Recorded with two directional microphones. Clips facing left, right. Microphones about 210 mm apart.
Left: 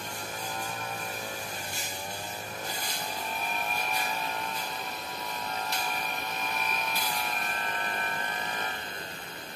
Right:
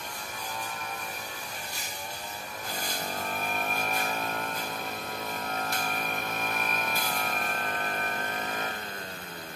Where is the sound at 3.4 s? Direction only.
50° right (ahead or behind).